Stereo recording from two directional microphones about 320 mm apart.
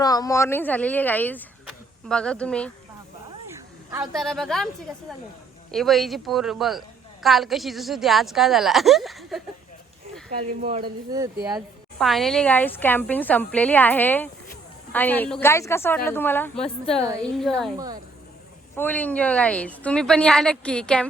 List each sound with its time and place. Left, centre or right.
0.0 s a woman's voice: centre
10.6 s speech: right
11.9 s a woman's voice: centre
18.8 s a woman's voice: centre